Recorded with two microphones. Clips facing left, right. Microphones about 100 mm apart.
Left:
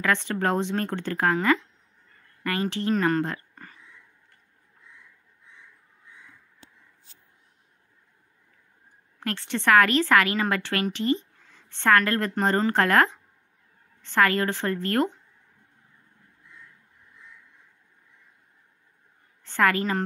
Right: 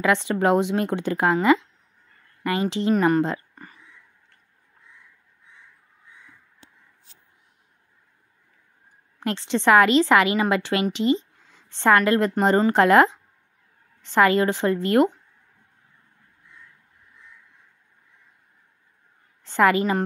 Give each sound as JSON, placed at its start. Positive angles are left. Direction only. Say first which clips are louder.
{"t": 0.0, "sound": "a woman's voice", "louder": "right 4 dB", "side_deg": -15}
{"t": 9.2, "sound": "a woman's voice", "louder": "right 5 dB", "side_deg": -20}
{"t": 19.4, "sound": "a woman's voice", "louder": "right 4 dB", "side_deg": -20}